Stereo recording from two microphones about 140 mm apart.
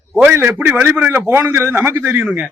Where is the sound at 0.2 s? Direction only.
15° right (ahead or behind).